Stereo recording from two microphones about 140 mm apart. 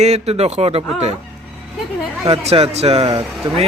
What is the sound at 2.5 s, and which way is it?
Speech, 50° right (ahead or behind).